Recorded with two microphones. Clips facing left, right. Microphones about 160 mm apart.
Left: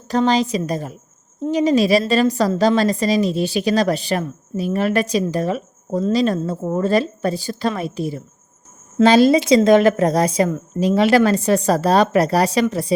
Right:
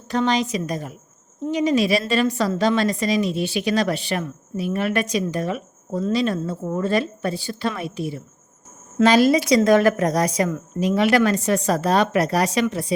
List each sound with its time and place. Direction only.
0.1 s a woman's voice: 35° left (ahead or behind)
9.0 s a woman's voice: 25° left (ahead or behind)